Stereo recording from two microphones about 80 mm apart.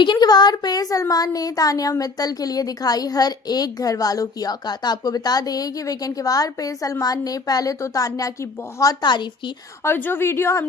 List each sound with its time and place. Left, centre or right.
0.0 s a child's voice: left
9.0 s a woman's voice: left
9.8 s a woman's voice: left